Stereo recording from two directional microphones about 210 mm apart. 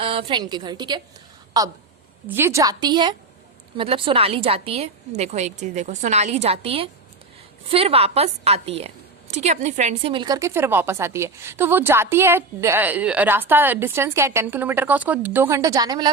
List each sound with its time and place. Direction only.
0.0 s a woman's voice: 25° right (ahead or behind)